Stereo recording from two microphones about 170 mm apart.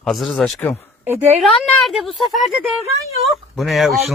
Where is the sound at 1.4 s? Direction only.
Centre (ahead or behind).